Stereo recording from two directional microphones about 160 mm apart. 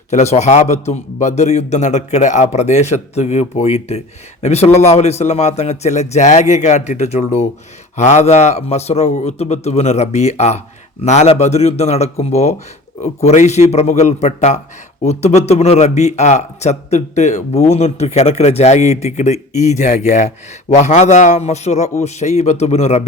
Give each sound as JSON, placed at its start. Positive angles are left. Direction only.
{"t": 0.1, "sound": "speech", "side_deg": 45}